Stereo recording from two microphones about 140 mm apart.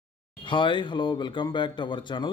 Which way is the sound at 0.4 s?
35° left (ahead or behind).